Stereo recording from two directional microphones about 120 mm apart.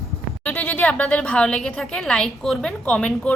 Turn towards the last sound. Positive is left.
turn(degrees=10)  # may be behind; listen again after turning